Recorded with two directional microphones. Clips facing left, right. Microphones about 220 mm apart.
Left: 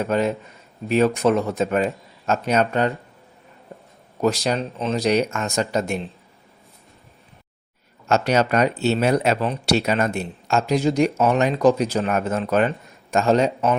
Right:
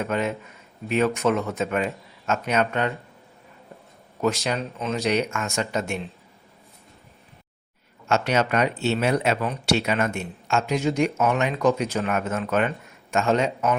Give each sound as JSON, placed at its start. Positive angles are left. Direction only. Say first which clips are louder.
{"t": 0.0, "sound": "speech", "louder": "left 4 dB", "side_deg": 35}
{"t": 4.4, "sound": "speech", "louder": "left 4 dB", "side_deg": 30}
{"t": 8.0, "sound": "speech", "louder": "left 3 dB", "side_deg": 40}